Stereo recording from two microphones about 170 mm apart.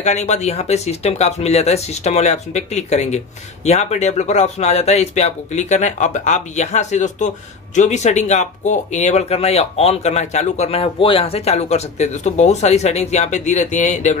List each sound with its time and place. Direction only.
0.0 s speech: 40° left (ahead or behind)